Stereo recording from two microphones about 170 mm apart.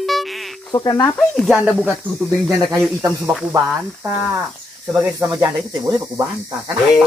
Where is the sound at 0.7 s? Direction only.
20° left (ahead or behind).